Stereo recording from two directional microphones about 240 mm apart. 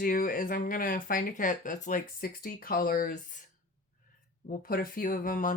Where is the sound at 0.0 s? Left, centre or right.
Left.